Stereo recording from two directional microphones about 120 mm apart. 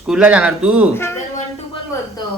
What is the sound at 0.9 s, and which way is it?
Speech, 20° left (ahead or behind).